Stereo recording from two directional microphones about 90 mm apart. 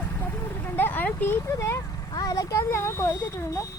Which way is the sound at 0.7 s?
20° left (ahead or behind).